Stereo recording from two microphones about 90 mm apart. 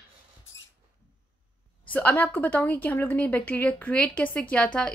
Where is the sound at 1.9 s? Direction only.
20° left (ahead or behind).